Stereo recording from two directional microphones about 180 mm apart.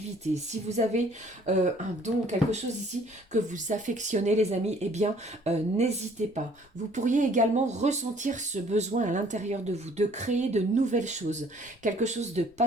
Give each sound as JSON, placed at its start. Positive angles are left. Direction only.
{"t": 0.3, "sound": "speech", "side_deg": -40}